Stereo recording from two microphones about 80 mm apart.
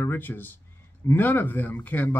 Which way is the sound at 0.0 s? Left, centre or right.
Left.